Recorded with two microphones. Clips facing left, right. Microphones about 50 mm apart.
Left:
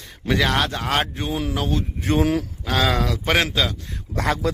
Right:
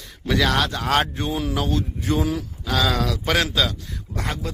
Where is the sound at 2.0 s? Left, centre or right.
Left.